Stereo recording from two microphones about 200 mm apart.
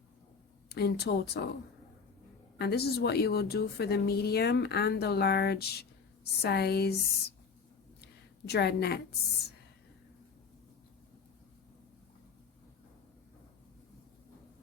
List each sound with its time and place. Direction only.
0.7 s a woman's voice: 55° left (ahead or behind)
2.6 s a woman's voice: 55° left (ahead or behind)
8.4 s speech: 55° left (ahead or behind)